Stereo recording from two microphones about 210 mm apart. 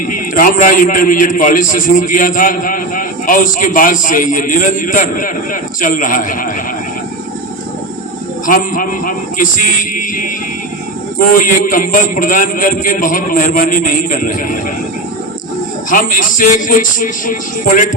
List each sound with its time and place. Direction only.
0.3 s a man's voice: 40° left (ahead or behind)
8.4 s a man's voice: 40° left (ahead or behind)
15.9 s a man's voice: 40° left (ahead or behind)